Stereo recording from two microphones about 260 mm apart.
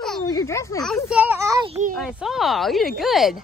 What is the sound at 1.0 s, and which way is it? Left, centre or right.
Speech, centre.